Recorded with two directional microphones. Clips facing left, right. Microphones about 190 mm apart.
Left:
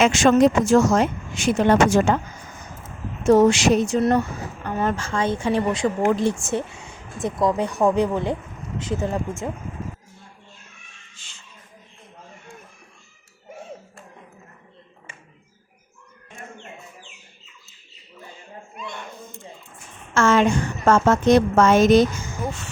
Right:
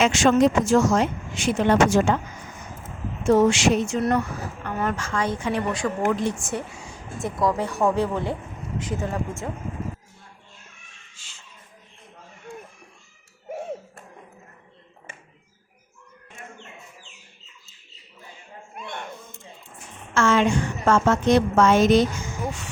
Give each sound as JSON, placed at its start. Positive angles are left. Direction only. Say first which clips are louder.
{"t": 0.0, "sound": "a woman's voice", "louder": "left 2 dB", "side_deg": 45}
{"t": 3.2, "sound": "speech", "louder": "left 3 dB", "side_deg": 40}
{"t": 18.8, "sound": "a sound", "louder": "even", "side_deg": -55}
{"t": 20.1, "sound": "a woman's voice", "louder": "left 2 dB", "side_deg": 45}